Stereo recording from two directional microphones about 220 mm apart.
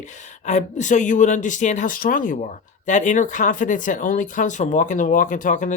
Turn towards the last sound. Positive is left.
turn(degrees=35)  # may be behind; listen again after turning